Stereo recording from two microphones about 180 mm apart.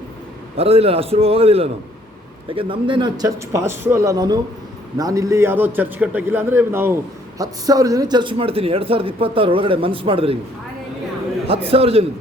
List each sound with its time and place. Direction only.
0.5 s a man's voice: 35° right (ahead or behind)
11.4 s a man's voice: 35° right (ahead or behind)